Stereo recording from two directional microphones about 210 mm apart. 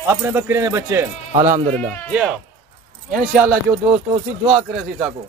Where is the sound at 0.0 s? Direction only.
10° right (ahead or behind).